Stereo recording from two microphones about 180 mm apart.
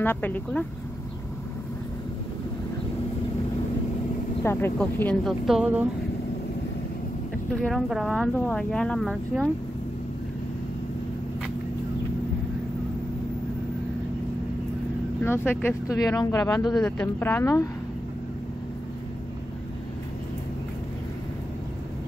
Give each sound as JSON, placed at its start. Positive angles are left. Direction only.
{"t": 0.0, "sound": "speech", "side_deg": 10}
{"t": 4.4, "sound": "speech", "side_deg": 10}
{"t": 7.6, "sound": "speech", "side_deg": 0}
{"t": 15.2, "sound": "speech", "side_deg": 10}
{"t": 16.7, "sound": "speech", "side_deg": 10}